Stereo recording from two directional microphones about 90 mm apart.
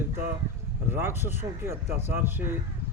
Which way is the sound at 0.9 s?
25° right (ahead or behind).